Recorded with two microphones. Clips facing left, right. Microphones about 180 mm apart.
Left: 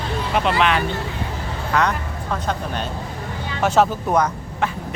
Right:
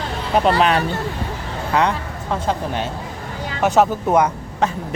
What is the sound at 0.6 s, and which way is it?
Speech, 35° right (ahead or behind).